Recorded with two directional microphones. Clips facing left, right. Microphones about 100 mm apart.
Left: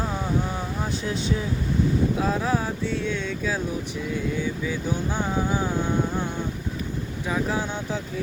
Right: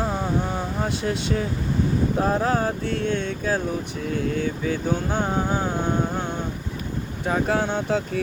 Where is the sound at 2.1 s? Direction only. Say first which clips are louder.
Right 3 dB; 50° right (ahead or behind).